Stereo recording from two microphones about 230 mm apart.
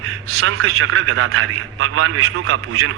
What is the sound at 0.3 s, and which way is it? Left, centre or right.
A man's voice, right.